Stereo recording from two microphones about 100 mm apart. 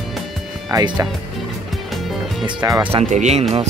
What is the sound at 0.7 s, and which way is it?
Speech, 35° right (ahead or behind).